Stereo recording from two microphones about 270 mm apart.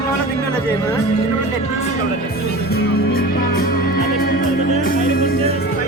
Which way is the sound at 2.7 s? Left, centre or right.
Left.